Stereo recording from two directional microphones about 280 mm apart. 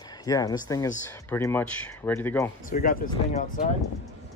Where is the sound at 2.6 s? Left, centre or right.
Left.